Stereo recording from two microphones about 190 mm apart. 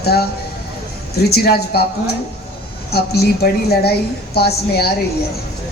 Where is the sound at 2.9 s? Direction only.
55° left (ahead or behind).